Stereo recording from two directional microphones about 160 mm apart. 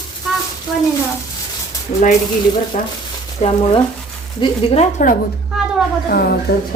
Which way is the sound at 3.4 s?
35° left (ahead or behind).